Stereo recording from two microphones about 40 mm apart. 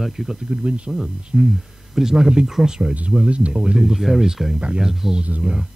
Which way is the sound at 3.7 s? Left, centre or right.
Centre.